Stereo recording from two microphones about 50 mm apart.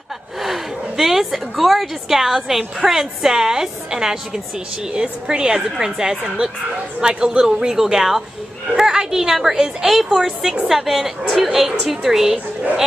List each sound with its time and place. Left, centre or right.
0.4 s a woman's voice: centre